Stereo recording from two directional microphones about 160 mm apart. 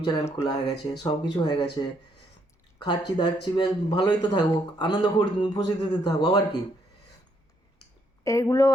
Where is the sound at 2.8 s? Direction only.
30° left (ahead or behind).